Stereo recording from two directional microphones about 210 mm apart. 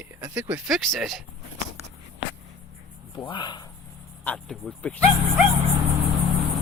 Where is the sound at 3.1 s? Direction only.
20° left (ahead or behind).